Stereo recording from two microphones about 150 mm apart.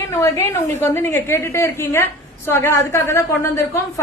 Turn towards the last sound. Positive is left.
turn(degrees=20)  # may be behind; listen again after turning